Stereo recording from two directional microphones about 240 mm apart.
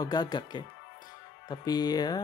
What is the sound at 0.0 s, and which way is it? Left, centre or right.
Speech, centre.